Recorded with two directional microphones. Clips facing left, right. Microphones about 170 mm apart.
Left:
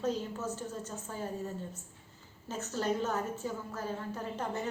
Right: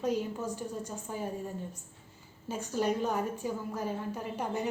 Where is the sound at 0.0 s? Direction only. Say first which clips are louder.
Right 2 dB; 15° right (ahead or behind).